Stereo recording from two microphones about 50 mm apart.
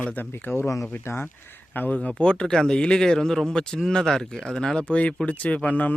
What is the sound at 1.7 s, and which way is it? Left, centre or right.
Speech, left.